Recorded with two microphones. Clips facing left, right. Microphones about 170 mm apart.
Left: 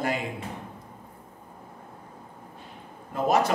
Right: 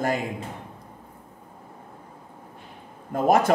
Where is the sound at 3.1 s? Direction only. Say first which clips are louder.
Right 4 dB; 50° right (ahead or behind).